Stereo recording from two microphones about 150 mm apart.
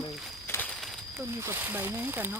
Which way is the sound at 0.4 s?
15° left (ahead or behind).